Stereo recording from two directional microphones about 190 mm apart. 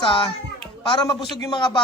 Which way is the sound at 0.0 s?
25° left (ahead or behind).